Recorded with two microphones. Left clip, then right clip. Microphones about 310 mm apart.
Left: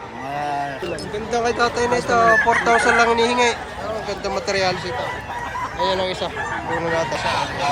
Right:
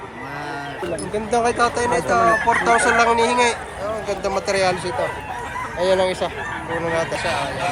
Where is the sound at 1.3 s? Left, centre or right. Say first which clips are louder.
Right 1 dB; centre.